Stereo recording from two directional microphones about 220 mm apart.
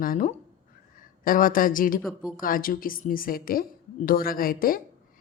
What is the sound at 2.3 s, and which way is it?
A woman's voice, 40° left (ahead or behind).